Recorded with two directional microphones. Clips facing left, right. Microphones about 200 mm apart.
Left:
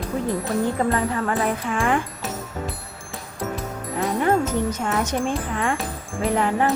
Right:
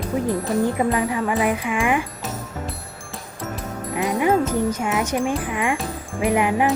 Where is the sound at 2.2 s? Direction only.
Centre (ahead or behind).